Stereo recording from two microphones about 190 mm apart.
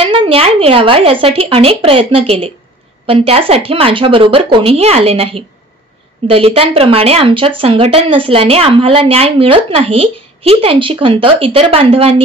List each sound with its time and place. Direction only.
0.0 s speech: 30° right (ahead or behind)